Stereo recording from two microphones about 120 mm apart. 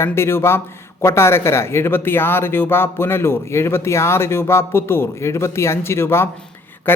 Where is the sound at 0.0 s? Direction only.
20° left (ahead or behind).